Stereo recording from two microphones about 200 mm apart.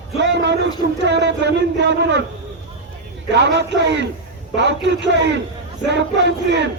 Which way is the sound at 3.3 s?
60° right (ahead or behind).